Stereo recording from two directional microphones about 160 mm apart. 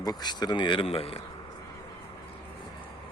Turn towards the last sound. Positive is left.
turn(degrees=35)  # may be behind; listen again after turning